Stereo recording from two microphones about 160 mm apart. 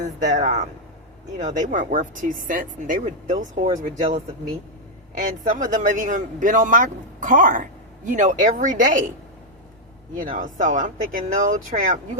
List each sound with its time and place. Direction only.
0.0 s speech: 50° right (ahead or behind)
10.2 s speech: 55° right (ahead or behind)